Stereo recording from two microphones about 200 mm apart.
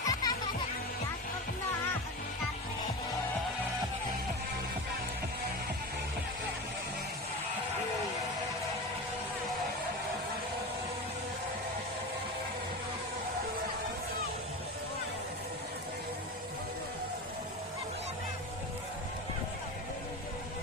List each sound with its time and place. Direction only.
0.0 s music: 20° left (ahead or behind)